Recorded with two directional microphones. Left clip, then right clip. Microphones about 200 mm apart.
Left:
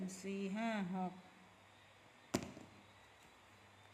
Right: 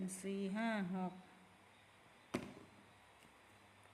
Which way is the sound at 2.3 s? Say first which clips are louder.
Left 3 dB; 30° left (ahead or behind).